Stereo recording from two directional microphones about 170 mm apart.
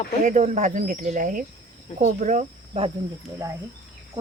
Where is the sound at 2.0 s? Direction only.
45° right (ahead or behind).